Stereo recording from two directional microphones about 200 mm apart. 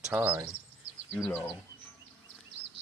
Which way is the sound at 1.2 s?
5° left (ahead or behind).